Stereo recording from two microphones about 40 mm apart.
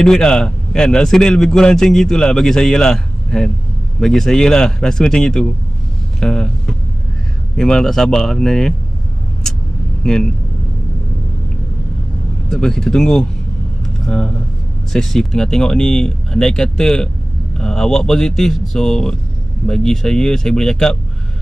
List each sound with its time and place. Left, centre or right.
0.0 s a man's voice: centre
6.1 s a sound: centre
7.5 s a man's voice: centre
10.0 s a man's voice: centre
12.4 s a man's voice: centre
13.8 s vehicle: centre
14.9 s a man's voice: centre